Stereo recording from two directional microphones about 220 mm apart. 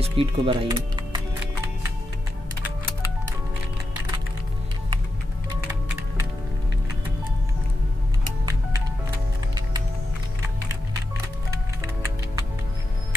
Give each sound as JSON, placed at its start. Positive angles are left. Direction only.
{"t": 0.0, "sound": "speech", "side_deg": -25}